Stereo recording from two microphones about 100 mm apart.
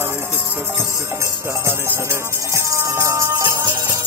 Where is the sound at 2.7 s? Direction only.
30° right (ahead or behind).